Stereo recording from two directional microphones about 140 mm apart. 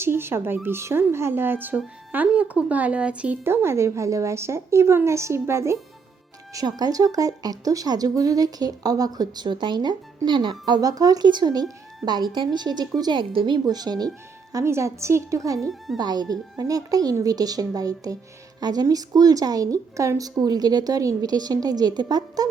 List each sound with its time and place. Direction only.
0.0 s a woman's voice: 15° right (ahead or behind)